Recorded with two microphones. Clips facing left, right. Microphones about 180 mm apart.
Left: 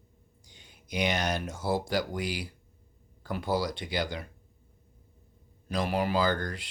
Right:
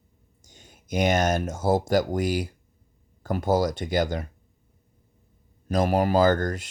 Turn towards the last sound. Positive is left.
turn(degrees=-45)  # may be behind; listen again after turning